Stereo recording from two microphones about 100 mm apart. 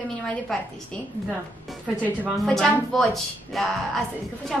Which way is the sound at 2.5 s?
5° left (ahead or behind).